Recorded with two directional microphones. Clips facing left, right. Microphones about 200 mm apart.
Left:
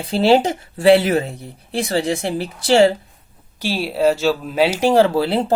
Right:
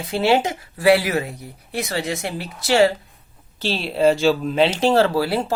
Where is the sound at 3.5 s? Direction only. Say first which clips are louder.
Left 1 dB; 10° left (ahead or behind).